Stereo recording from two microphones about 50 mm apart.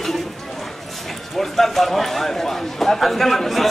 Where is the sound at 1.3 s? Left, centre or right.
Centre.